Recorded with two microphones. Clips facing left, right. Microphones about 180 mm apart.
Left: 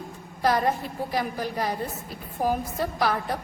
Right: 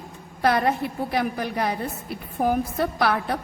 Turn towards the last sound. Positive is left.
turn(degrees=-65)  # may be behind; listen again after turning